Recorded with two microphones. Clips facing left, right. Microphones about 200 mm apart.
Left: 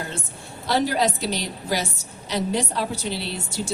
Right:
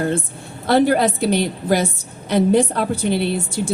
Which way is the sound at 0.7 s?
55° right (ahead or behind).